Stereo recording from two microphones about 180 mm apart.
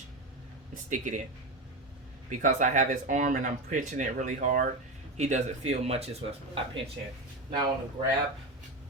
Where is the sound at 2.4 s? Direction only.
45° right (ahead or behind).